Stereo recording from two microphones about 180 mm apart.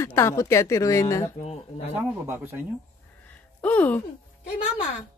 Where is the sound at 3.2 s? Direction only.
10° left (ahead or behind).